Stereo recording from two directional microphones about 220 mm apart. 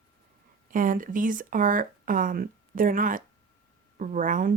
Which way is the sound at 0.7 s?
40° right (ahead or behind).